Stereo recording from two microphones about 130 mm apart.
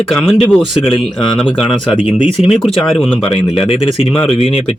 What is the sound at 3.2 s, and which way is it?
Speech, 45° left (ahead or behind).